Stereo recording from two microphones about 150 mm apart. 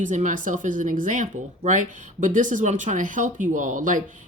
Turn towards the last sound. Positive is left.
turn(degrees=-60)  # may be behind; listen again after turning